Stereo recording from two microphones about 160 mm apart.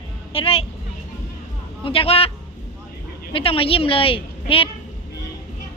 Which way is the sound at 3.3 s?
35° left (ahead or behind).